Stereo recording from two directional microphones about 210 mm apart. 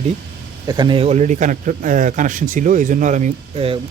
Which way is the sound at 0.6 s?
20° right (ahead or behind).